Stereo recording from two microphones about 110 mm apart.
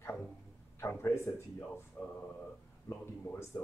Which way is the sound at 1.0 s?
25° left (ahead or behind).